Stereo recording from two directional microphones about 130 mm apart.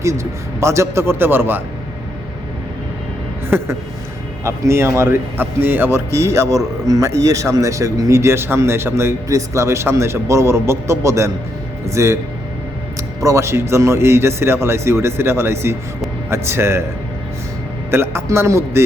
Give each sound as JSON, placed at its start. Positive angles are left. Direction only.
{"t": 0.0, "sound": "speech", "side_deg": -20}
{"t": 4.4, "sound": "speech", "side_deg": -20}
{"t": 13.2, "sound": "speech", "side_deg": -20}
{"t": 17.9, "sound": "speech", "side_deg": -20}